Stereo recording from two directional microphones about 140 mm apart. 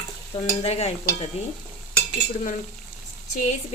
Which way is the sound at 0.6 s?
50° left (ahead or behind).